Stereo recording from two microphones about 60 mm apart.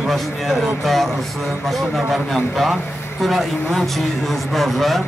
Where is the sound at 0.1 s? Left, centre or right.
Centre.